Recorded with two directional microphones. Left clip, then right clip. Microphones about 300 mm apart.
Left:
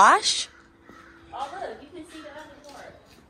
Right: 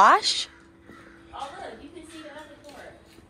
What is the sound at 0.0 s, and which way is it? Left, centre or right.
Speech, centre.